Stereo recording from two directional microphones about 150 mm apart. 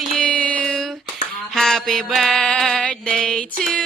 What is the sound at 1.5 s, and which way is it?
Mantra, centre (ahead or behind).